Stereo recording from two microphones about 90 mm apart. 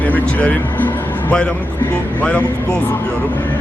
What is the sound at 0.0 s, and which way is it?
A man's voice, 20° left (ahead or behind).